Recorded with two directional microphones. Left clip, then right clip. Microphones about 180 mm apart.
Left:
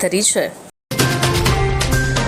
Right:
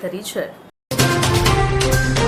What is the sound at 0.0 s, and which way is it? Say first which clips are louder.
Speech: left 8 dB; 40° left (ahead or behind).